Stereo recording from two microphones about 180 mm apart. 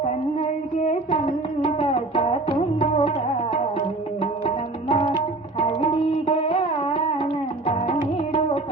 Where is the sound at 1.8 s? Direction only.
30° left (ahead or behind).